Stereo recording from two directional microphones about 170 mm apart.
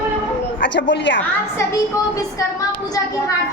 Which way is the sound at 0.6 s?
90° left.